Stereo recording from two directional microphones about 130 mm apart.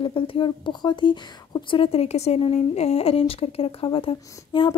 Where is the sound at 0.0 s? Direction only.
45° left (ahead or behind).